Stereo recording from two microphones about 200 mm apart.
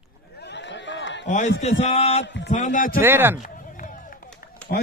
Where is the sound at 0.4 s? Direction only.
60° left (ahead or behind).